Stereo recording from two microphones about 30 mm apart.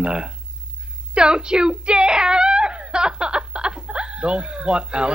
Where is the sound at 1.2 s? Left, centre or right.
Right.